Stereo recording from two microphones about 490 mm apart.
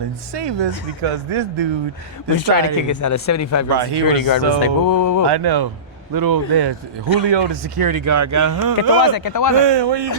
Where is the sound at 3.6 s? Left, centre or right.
Right.